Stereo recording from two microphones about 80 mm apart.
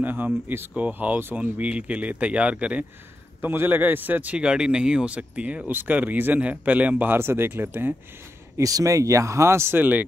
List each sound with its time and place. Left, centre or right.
0.0 s speech: right
3.3 s speech: right
8.5 s speech: right